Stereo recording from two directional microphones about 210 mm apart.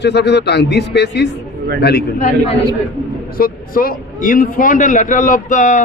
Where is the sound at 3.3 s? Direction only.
45° left (ahead or behind).